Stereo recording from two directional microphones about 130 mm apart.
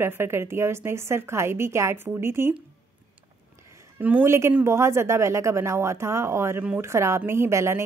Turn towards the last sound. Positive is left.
turn(degrees=-20)  # may be behind; listen again after turning